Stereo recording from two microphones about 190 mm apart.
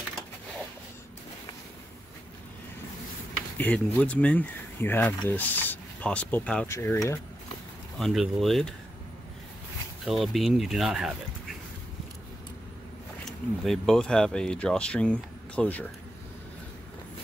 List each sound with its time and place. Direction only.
3.5 s speech: 10° left (ahead or behind)
8.0 s speech: centre (ahead or behind)
10.0 s speech: centre (ahead or behind)
13.2 s speech: centre (ahead or behind)